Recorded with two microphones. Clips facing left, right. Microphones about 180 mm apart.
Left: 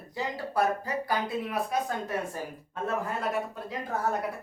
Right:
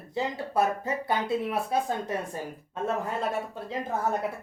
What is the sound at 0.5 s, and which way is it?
Speech, 25° right (ahead or behind).